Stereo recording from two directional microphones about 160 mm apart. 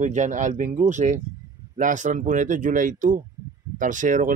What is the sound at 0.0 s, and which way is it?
Speech, 50° right (ahead or behind).